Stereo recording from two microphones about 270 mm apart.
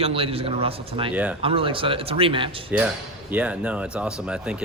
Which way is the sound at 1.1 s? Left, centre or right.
Centre.